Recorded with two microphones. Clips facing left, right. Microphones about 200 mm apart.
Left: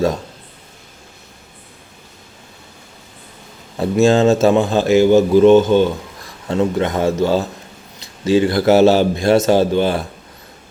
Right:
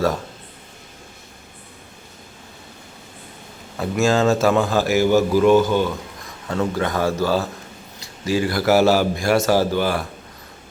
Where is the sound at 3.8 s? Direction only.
25° left (ahead or behind).